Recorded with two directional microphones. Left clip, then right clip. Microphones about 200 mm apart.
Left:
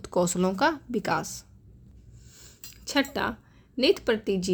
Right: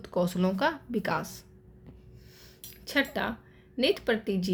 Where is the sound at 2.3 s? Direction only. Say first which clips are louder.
Left 3 dB; 35° left (ahead or behind).